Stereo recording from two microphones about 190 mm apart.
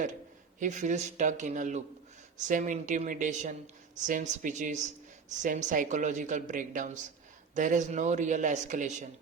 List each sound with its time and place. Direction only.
0.6 s a woman's voice: 40° right (ahead or behind)